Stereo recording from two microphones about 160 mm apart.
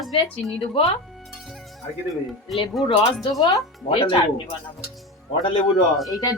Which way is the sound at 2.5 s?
Centre (ahead or behind).